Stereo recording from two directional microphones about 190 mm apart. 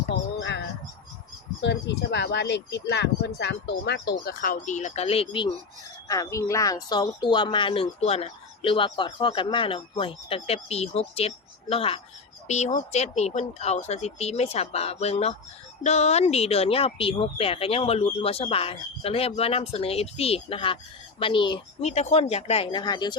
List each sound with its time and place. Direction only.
0.1 s bird: 65° left (ahead or behind)
1.6 s speech: 65° left (ahead or behind); by 5.5 s 30° left (ahead or behind)
6.1 s speech: 15° left (ahead or behind)